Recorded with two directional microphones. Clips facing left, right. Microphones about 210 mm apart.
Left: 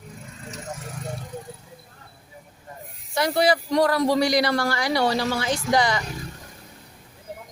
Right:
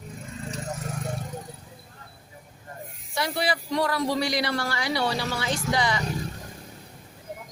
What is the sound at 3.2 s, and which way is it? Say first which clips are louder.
A man's voice: left 7 dB; 45° left (ahead or behind).